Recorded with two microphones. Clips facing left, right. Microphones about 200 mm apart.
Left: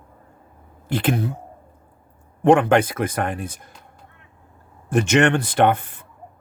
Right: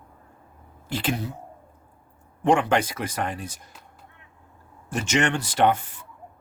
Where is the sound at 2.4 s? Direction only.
55° left (ahead or behind).